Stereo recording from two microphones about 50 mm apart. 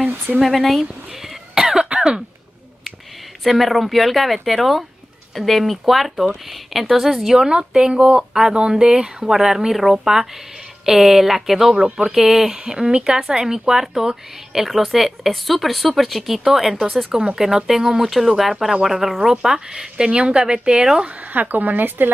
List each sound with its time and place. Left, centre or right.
0.0 s a sound: right
0.4 s cough: centre
3.4 s speech: centre
8.3 s speech: centre
11.7 s speech: centre
12.1 s speech: centre
21.0 s speech: right